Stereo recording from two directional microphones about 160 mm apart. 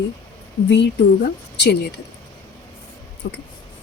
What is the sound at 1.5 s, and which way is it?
Speech, 90° left.